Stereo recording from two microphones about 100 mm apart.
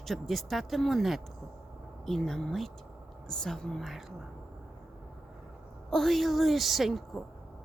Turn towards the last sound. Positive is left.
turn(degrees=0)  # may be behind; listen again after turning